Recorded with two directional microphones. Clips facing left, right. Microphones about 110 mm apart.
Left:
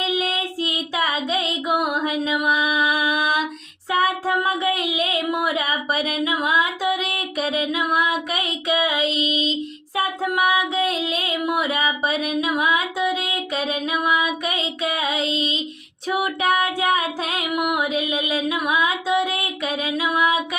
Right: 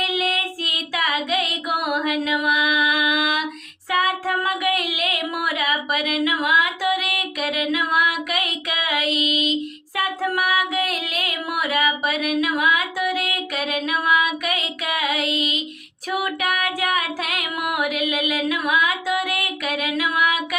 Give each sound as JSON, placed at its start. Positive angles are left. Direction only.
{"t": 0.0, "sound": "child singing", "side_deg": 25}
{"t": 10.0, "sound": "music", "side_deg": 20}